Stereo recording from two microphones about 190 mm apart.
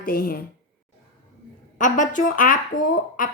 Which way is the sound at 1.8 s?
40° left (ahead or behind).